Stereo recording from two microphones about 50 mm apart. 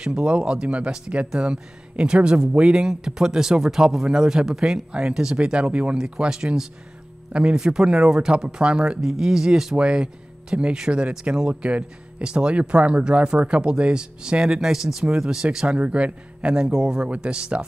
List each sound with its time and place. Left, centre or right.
0.0 s speech: centre
5.9 s speech: centre